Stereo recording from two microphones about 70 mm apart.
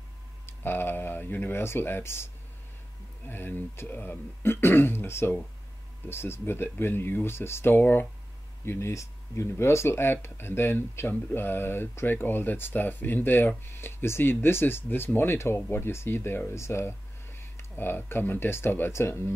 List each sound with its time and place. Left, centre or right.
0.5 s speech: left
8.6 s speech: left